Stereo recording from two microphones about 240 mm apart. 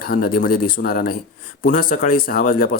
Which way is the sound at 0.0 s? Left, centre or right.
Left.